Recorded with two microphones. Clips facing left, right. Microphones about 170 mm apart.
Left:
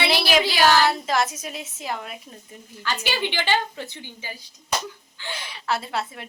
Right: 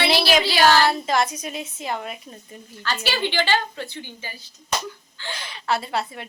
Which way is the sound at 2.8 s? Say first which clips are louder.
Right 1 dB; 15° left (ahead or behind).